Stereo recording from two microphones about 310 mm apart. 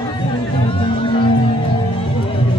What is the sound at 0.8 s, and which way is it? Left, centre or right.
Music, centre.